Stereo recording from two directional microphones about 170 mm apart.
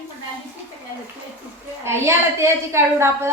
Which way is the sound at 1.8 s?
15° right (ahead or behind).